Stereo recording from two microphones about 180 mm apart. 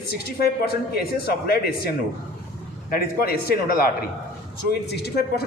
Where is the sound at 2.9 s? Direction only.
55° left (ahead or behind).